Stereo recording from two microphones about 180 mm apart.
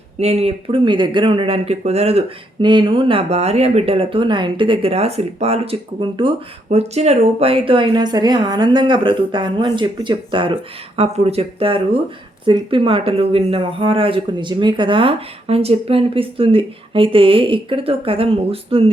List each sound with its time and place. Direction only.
0.2 s speech: 35° right (ahead or behind)